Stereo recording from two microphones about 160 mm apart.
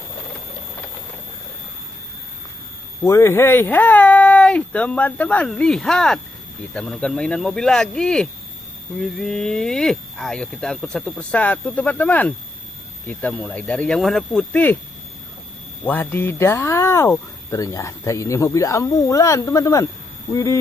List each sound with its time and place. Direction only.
3.0 s speech: 20° left (ahead or behind)
15.8 s speech: 10° left (ahead or behind)